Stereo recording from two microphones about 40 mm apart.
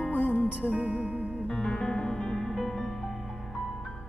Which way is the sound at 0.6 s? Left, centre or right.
Right.